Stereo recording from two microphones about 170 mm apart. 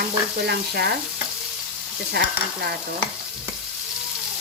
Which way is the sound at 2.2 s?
70° right (ahead or behind).